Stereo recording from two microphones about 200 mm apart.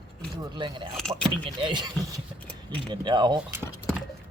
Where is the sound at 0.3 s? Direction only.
20° right (ahead or behind).